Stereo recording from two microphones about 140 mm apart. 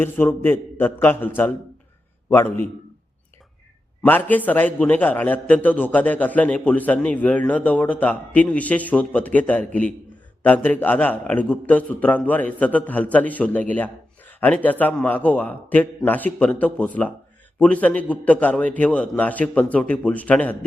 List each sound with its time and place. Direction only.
0.0 s a man's voice: 15° left (ahead or behind)
4.0 s a man's voice: 10° left (ahead or behind)